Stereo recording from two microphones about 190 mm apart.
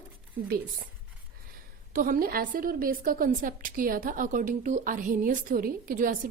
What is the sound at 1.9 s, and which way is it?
A woman's voice, 50° right (ahead or behind).